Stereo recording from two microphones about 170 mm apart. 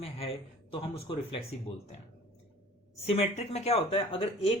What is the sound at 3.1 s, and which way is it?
Speech, 40° left (ahead or behind).